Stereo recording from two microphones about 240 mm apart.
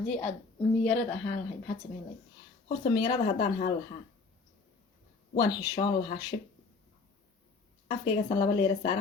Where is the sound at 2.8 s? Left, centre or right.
Centre.